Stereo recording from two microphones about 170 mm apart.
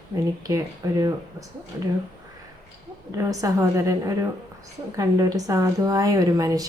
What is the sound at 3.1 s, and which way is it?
A woman's voice, 20° right (ahead or behind).